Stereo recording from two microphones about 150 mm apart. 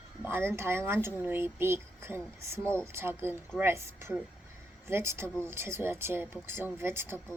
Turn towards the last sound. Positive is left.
turn(degrees=-15)  # may be behind; listen again after turning